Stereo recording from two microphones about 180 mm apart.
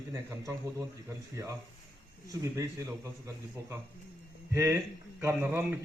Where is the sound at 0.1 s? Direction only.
15° right (ahead or behind).